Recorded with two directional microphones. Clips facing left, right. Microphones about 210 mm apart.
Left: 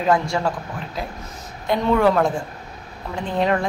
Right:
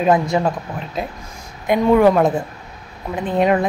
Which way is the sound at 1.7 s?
15° right (ahead or behind).